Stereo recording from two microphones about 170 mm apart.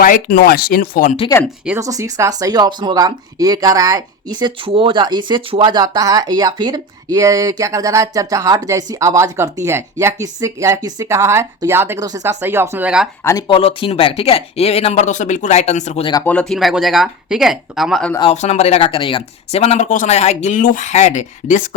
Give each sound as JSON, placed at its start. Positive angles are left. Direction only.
{"t": 0.0, "sound": "speech", "side_deg": 55}
{"t": 1.3, "sound": "speech", "side_deg": 20}
{"t": 1.8, "sound": "speech", "side_deg": -20}
{"t": 13.5, "sound": "speech", "side_deg": 35}
{"t": 16.2, "sound": "speech", "side_deg": 5}
{"t": 18.2, "sound": "speech", "side_deg": 40}